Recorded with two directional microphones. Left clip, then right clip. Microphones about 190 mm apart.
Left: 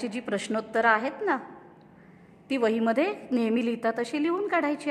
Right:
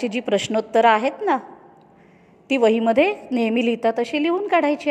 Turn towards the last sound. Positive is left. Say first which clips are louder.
# right 7 dB
turn(degrees=-15)  # may be behind; listen again after turning